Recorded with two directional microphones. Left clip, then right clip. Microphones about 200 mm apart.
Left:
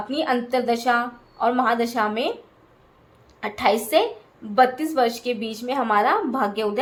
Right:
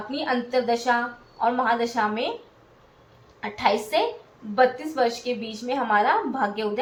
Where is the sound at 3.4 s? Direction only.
55° left (ahead or behind).